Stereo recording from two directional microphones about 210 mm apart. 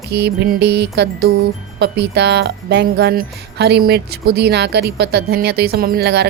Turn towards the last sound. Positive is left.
turn(degrees=-50)  # may be behind; listen again after turning